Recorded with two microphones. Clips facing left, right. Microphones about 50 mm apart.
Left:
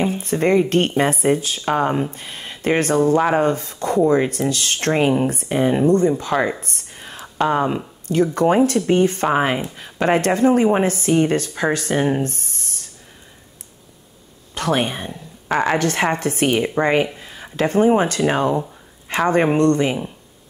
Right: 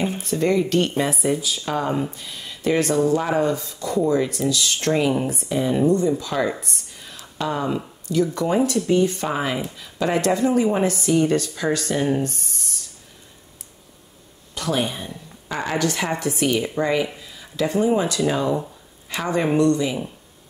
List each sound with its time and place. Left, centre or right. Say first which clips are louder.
0.2 s speech: left 3 dB; left
6.6 s a sound: left 2 dB; left
8.1 s speech: left 4 dB; left
14.5 s speech: left 4 dB; left